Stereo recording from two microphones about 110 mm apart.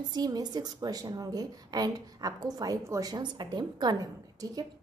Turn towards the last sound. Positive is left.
turn(degrees=-35)  # may be behind; listen again after turning